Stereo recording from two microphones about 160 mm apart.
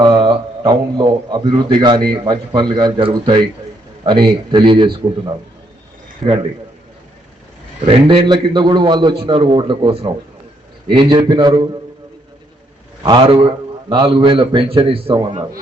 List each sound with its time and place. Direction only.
0.0 s a man's voice: 25° right (ahead or behind)
6.2 s a man's voice: 35° right (ahead or behind)
7.9 s a man's voice: 30° right (ahead or behind)
13.0 s a man's voice: 30° right (ahead or behind)